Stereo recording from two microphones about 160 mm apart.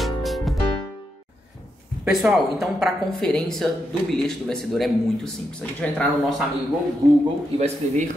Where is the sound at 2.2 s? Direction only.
Centre (ahead or behind).